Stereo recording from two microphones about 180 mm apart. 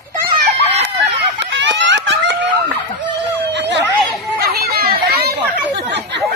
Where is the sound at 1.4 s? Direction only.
80° right.